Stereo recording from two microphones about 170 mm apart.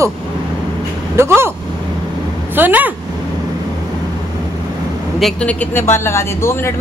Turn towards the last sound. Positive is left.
turn(degrees=15)  # may be behind; listen again after turning